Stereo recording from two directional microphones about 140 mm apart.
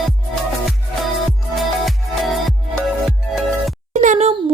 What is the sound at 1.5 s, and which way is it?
Music, centre (ahead or behind).